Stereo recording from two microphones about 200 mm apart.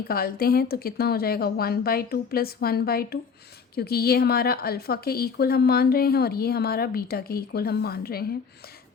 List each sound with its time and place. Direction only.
0.1 s a woman's voice: 50° left (ahead or behind)